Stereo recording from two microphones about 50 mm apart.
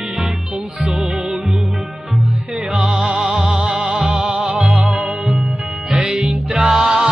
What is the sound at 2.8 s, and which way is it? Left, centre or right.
Music, centre.